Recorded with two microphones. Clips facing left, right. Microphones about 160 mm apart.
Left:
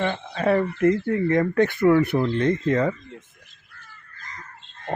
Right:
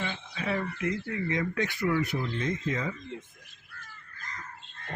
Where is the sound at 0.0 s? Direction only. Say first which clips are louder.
Left 11 dB; 55° left (ahead or behind).